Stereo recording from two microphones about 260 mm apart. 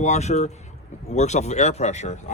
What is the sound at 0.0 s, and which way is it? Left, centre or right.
Speech, left.